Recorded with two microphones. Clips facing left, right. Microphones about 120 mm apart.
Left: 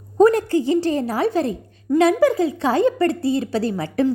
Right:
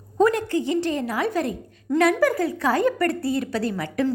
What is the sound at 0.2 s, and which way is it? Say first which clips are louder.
A woman's voice: left 5 dB; 35° left (ahead or behind).